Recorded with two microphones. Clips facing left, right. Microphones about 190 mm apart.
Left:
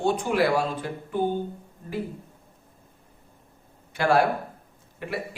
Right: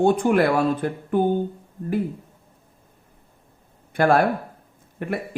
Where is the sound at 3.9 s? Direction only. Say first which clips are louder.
Right 3 dB; 55° right (ahead or behind).